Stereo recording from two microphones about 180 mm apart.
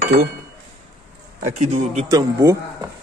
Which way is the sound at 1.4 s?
40° right (ahead or behind).